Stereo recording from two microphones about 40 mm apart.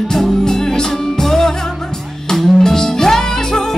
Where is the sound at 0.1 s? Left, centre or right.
Centre.